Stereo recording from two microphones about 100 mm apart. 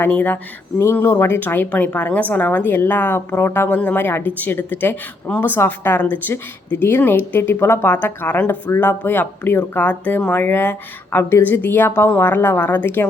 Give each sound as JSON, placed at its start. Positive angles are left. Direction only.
{"t": 0.0, "sound": "speech", "side_deg": 15}
{"t": 0.8, "sound": "a woman's voice", "side_deg": 25}